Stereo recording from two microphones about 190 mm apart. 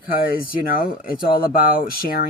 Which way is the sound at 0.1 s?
50° left (ahead or behind).